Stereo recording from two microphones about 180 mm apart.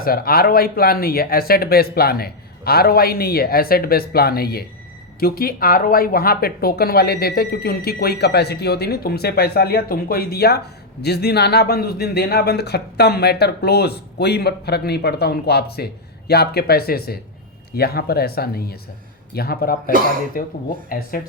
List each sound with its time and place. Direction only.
0.0 s a man's voice: 55° left (ahead or behind)